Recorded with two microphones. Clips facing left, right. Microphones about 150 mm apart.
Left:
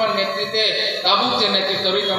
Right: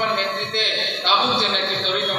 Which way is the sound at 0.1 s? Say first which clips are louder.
Left 3 dB; 60° left (ahead or behind).